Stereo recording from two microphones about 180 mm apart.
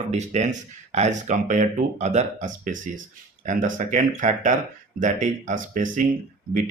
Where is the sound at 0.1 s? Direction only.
40° right (ahead or behind).